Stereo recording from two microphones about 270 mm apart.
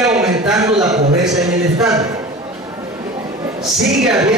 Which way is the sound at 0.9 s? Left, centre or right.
Right.